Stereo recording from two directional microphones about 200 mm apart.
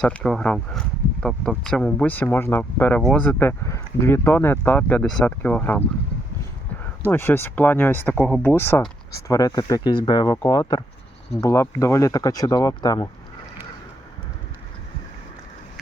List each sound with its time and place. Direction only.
0.0 s speech: 5° left (ahead or behind)
7.1 s speech: 10° left (ahead or behind)